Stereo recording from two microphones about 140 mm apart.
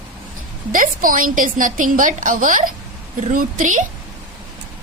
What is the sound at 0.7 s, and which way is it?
A woman's voice, 75° right (ahead or behind).